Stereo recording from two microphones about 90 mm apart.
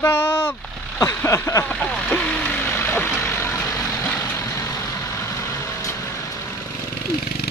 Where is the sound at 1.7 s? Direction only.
10° left (ahead or behind).